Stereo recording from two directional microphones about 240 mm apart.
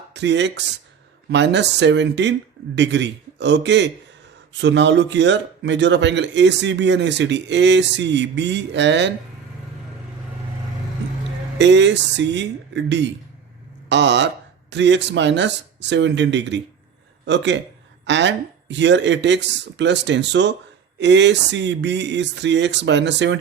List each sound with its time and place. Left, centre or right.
0.1 s speech: right
11.5 s speech: right